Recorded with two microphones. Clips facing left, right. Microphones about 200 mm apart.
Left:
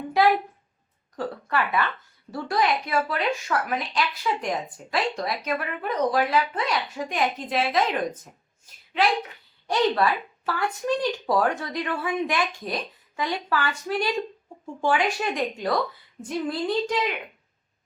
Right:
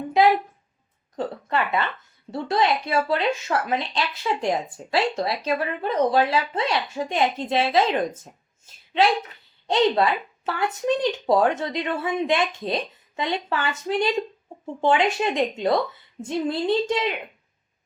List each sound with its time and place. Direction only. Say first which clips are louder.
1.1 s speech: right 2 dB; 20° right (ahead or behind)